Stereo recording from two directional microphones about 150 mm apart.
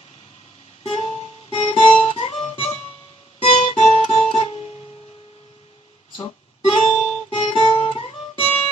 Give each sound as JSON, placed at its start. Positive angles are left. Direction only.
{"t": 0.9, "sound": "music", "side_deg": 45}
{"t": 6.7, "sound": "guitar", "side_deg": 45}